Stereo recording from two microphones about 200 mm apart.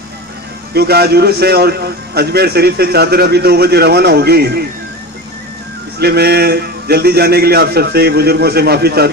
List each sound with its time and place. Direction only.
0.7 s a man's voice: 50° right (ahead or behind)
6.0 s a man's voice: 50° right (ahead or behind)